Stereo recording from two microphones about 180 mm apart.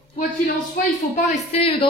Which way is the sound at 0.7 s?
45° left (ahead or behind).